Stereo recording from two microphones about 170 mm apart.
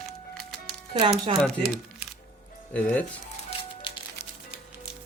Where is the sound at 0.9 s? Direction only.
30° right (ahead or behind).